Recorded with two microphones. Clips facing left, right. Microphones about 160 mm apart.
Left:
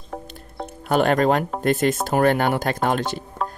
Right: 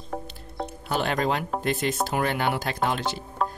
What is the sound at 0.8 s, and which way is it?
Speech, 50° left (ahead or behind).